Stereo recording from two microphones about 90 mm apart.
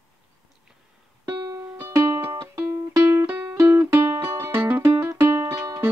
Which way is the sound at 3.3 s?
20° right (ahead or behind).